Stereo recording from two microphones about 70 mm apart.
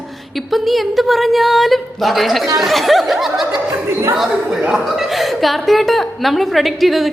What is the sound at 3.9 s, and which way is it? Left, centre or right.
Speech, right.